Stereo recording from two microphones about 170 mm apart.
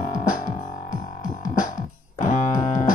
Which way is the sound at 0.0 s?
50° left (ahead or behind).